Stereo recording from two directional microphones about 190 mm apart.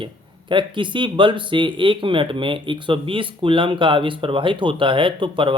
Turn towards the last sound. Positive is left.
turn(degrees=-25)  # may be behind; listen again after turning